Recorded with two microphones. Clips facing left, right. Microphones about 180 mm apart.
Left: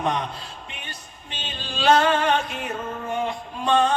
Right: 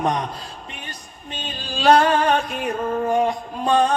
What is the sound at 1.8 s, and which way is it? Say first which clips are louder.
Music: right 3 dB; 35° right (ahead or behind).